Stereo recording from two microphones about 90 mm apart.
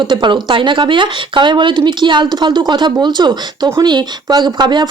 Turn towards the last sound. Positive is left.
turn(degrees=-55)  # may be behind; listen again after turning